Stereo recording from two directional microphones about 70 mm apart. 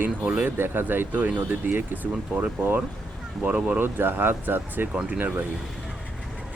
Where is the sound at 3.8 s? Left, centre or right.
Right.